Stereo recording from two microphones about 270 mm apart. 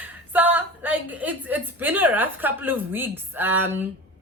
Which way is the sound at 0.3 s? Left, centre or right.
Centre.